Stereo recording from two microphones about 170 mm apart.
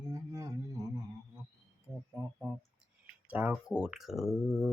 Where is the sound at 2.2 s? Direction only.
20° right (ahead or behind).